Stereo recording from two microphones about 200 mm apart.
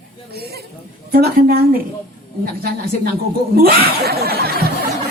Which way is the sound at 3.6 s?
50° right (ahead or behind).